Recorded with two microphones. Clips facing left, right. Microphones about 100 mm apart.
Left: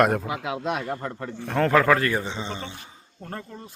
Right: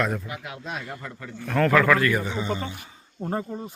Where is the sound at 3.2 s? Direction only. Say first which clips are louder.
Right 8 dB; 20° right (ahead or behind).